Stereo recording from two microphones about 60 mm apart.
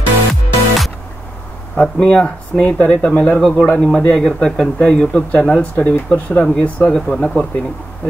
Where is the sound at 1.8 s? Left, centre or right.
Centre.